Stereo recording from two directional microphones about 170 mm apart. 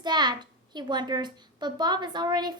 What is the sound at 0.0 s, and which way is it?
A child's voice, 25° right (ahead or behind).